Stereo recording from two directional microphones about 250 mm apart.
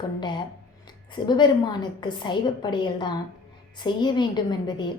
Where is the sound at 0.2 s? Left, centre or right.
Centre.